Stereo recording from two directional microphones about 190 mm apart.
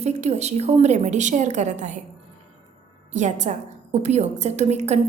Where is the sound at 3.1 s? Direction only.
40° right (ahead or behind).